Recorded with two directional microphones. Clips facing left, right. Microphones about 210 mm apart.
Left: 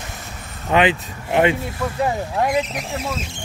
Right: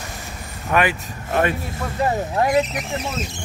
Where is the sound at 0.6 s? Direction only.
20° left (ahead or behind).